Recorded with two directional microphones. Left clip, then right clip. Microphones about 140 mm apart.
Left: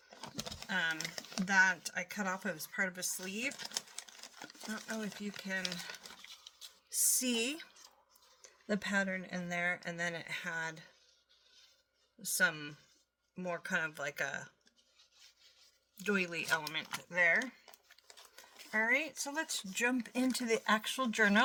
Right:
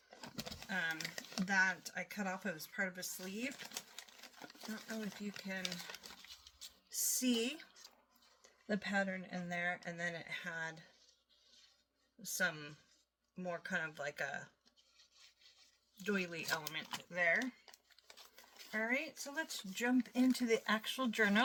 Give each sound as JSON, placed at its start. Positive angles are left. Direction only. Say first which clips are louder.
{"t": 0.2, "sound": "a sound", "louder": "left 4 dB", "side_deg": 30}
{"t": 0.7, "sound": "a sound", "louder": "left 5 dB", "side_deg": 40}
{"t": 0.9, "sound": "speech", "louder": "left 3 dB", "side_deg": 25}
{"t": 1.5, "sound": "speech", "louder": "left 5 dB", "side_deg": 45}
{"t": 6.0, "sound": "coin", "louder": "left 3 dB", "side_deg": 0}
{"t": 6.9, "sound": "a sound", "louder": "left 3 dB", "side_deg": 40}
{"t": 8.4, "sound": "speech", "louder": "left 3 dB", "side_deg": 50}
{"t": 12.2, "sound": "speech", "louder": "left 6 dB", "side_deg": 45}
{"t": 16.0, "sound": "speech", "louder": "left 5 dB", "side_deg": 45}